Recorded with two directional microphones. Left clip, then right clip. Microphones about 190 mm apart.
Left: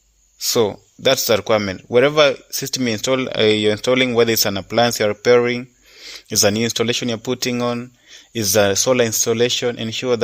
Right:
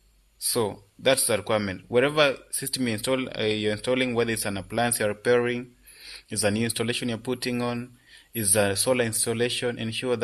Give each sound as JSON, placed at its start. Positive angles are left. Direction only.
{"t": 0.3, "sound": "speech", "side_deg": 40}